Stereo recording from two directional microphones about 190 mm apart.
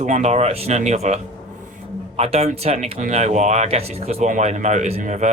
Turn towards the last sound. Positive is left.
turn(degrees=-40)  # may be behind; listen again after turning